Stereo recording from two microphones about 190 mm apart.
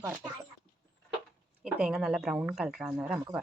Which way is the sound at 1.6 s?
5° right (ahead or behind).